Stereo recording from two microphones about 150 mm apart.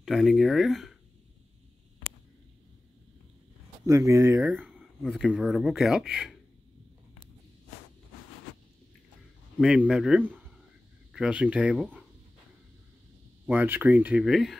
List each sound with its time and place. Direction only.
0.0 s speech: centre (ahead or behind)
3.8 s speech: 20° right (ahead or behind)
4.4 s speech: 5° right (ahead or behind)
9.6 s speech: 5° right (ahead or behind)
11.7 s speech: 5° left (ahead or behind)
13.5 s speech: 10° right (ahead or behind)